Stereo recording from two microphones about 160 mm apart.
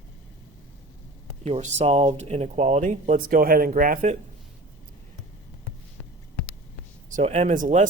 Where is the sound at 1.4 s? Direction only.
45° right (ahead or behind).